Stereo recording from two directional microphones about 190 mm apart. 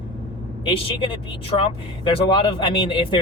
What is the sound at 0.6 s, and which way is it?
Speech, 25° left (ahead or behind).